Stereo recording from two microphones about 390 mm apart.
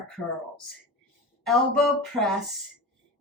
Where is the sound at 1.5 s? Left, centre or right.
Centre.